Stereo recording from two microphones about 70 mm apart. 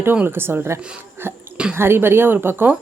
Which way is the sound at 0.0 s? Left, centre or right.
Right.